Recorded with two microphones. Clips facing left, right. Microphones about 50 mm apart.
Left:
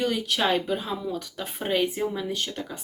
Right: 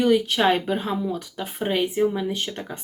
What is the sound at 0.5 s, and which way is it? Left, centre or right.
Speech, right.